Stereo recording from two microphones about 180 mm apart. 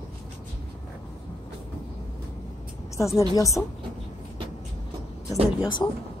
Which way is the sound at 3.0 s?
15° left (ahead or behind).